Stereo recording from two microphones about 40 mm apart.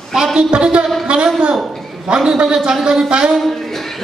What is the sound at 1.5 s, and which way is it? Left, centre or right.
Speech, centre.